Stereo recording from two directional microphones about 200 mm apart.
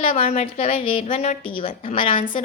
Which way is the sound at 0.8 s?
45° left (ahead or behind).